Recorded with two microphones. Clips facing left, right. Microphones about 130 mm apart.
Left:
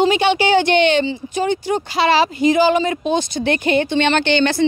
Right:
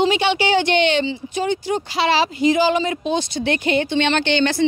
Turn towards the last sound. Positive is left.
turn(degrees=55)  # may be behind; listen again after turning